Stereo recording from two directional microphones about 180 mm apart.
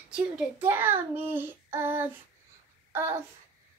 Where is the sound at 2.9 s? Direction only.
15° right (ahead or behind).